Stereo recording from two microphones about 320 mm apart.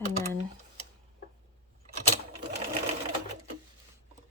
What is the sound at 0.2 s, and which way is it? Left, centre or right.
Typing, centre.